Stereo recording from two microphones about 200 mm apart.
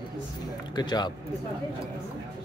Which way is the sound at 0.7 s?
20° left (ahead or behind).